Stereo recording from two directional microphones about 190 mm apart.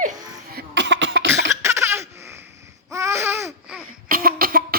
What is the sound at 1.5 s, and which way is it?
Baby laughter, 15° right (ahead or behind).